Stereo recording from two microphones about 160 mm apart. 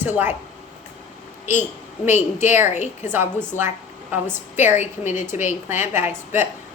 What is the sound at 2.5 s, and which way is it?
Speech, 15° right (ahead or behind).